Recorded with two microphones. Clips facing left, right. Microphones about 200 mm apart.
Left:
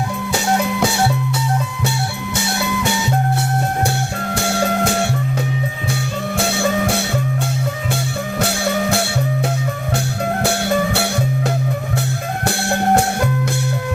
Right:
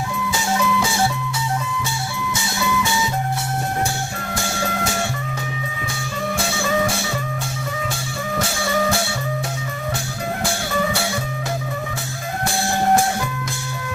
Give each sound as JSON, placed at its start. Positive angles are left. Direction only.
{"t": 0.3, "sound": "music", "side_deg": 65}
{"t": 2.3, "sound": "music", "side_deg": 65}
{"t": 4.4, "sound": "music", "side_deg": 65}
{"t": 6.3, "sound": "music", "side_deg": 65}
{"t": 8.4, "sound": "music", "side_deg": 60}
{"t": 12.5, "sound": "music", "side_deg": 65}